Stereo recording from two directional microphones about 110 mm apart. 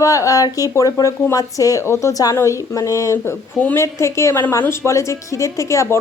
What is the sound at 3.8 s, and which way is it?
A woman's voice, 25° left (ahead or behind).